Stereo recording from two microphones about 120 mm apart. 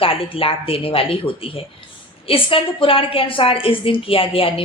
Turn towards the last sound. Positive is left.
turn(degrees=50)  # may be behind; listen again after turning